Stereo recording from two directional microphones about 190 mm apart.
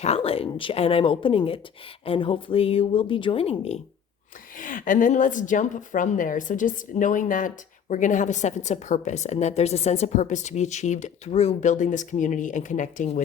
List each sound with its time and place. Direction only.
0.0 s speech: 30° left (ahead or behind)
4.5 s a woman's voice: 45° left (ahead or behind)